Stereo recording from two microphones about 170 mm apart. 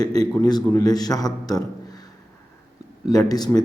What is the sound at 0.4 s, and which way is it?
A man's voice, 20° left (ahead or behind).